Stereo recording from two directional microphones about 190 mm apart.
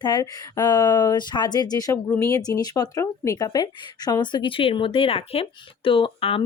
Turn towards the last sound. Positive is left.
turn(degrees=30)  # may be behind; listen again after turning